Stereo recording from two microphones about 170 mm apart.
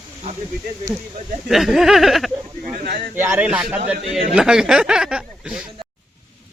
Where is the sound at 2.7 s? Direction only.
55° right (ahead or behind).